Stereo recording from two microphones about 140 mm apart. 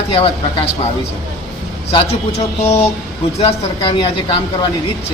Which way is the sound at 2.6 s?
50° left (ahead or behind).